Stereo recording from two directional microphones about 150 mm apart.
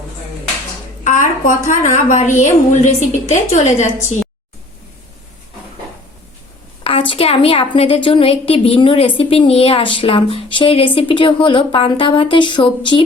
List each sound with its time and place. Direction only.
1.0 s a woman's voice: 60° left (ahead or behind)
6.8 s a woman's voice: 40° left (ahead or behind)